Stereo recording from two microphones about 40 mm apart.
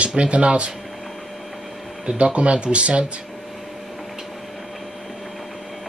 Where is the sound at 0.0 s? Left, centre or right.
Right.